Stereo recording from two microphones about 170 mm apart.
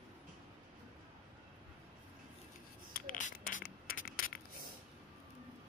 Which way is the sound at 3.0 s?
50° left (ahead or behind).